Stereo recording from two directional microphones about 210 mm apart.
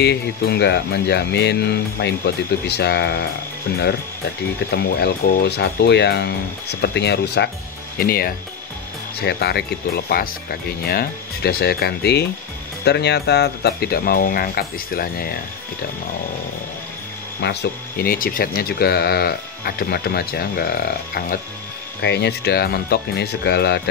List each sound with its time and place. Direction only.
0.0 s speech: 55° left (ahead or behind)
4.7 s speech: 50° left (ahead or behind)
17.4 s speech: 50° left (ahead or behind)